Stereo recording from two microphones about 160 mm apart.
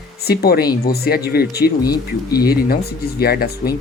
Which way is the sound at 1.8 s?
25° left (ahead or behind).